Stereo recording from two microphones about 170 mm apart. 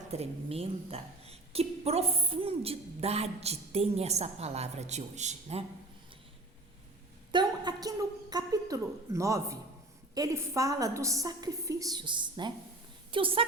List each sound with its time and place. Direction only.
0.1 s a woman's voice: 35° right (ahead or behind)
7.3 s a sound: 25° right (ahead or behind)
10.2 s a woman's voice: 15° right (ahead or behind)